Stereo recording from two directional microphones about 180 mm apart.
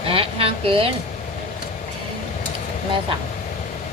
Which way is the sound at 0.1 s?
30° right (ahead or behind).